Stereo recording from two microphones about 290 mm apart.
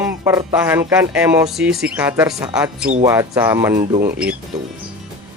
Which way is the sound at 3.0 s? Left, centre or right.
Centre.